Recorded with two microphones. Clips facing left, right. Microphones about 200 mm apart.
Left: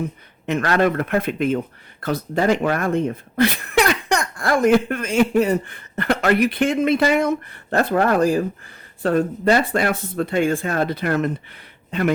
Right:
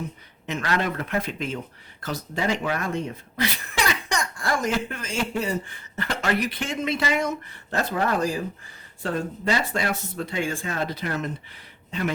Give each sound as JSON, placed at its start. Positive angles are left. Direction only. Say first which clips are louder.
{"t": 0.4, "sound": "speech", "louder": "left 8 dB", "side_deg": 60}